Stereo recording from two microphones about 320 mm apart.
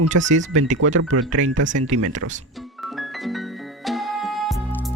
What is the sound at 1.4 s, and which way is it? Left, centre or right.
Speech, right.